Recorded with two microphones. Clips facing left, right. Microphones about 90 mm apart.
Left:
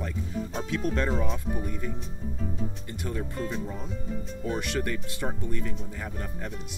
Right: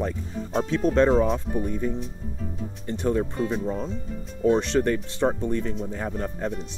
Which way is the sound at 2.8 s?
30° right (ahead or behind).